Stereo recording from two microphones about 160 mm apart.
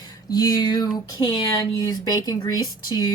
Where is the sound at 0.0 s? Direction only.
25° left (ahead or behind).